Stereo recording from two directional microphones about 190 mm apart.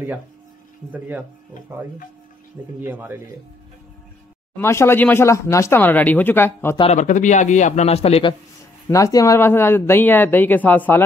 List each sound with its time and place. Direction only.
0.9 s speech: 10° right (ahead or behind)
2.8 s speech: 10° right (ahead or behind)
4.6 s speech: 15° left (ahead or behind)
6.8 s a man's voice: 40° left (ahead or behind)
8.8 s speech: 15° left (ahead or behind)